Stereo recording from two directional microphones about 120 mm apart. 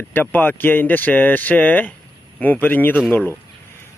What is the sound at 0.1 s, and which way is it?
Speech, 15° left (ahead or behind).